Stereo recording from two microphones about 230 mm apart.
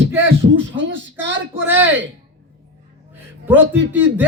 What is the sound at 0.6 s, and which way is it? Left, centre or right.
Speech, right.